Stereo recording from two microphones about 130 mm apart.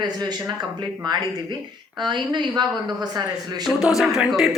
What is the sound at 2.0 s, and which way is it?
Speech, 35° right (ahead or behind).